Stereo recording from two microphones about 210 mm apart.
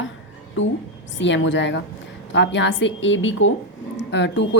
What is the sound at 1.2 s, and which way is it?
A woman's voice, 60° left (ahead or behind).